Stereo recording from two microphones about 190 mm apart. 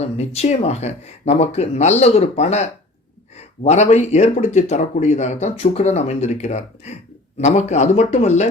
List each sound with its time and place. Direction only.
0.0 s speech: 35° left (ahead or behind)